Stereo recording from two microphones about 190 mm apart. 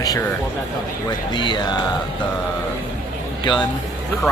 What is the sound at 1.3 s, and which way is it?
Speech, 25° left (ahead or behind).